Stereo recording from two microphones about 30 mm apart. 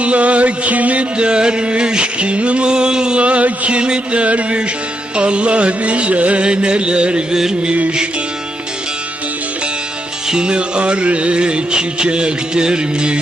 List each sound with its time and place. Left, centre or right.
0.0 s music: right
1.1 s music: right
3.2 s music: right
3.7 s music: right
4.2 s music: right
6.4 s music: right
10.2 s music: right